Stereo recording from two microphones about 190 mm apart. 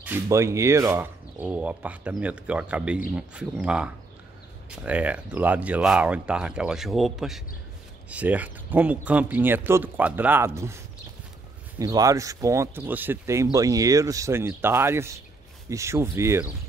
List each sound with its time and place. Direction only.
0.0 s speech: 10° right (ahead or behind)
11.8 s speech: 20° right (ahead or behind)